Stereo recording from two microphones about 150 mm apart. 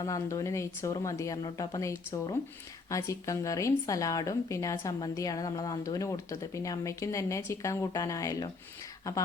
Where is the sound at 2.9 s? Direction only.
20° left (ahead or behind).